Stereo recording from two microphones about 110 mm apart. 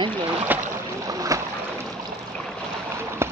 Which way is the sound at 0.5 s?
15° right (ahead or behind).